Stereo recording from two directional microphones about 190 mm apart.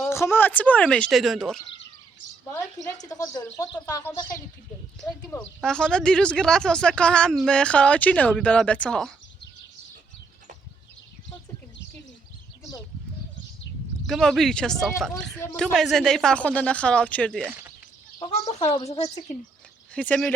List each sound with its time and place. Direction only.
0.1 s speech: 15° left (ahead or behind)
3.0 s speech: 20° left (ahead or behind)
4.9 s speech: 5° left (ahead or behind)
14.1 s speech: centre (ahead or behind)
18.6 s speech: 35° left (ahead or behind)
19.9 s speech: 5° left (ahead or behind)